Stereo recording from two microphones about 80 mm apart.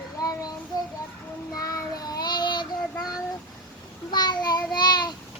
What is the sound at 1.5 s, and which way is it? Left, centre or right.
Child singing, left.